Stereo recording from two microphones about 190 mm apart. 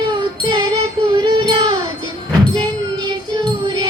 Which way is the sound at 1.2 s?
25° right (ahead or behind).